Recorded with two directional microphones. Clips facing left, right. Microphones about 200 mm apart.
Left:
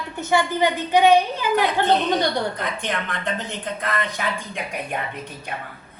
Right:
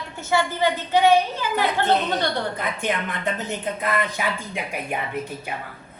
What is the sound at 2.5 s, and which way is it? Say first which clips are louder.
Speech: right 1 dB; 5° right (ahead or behind).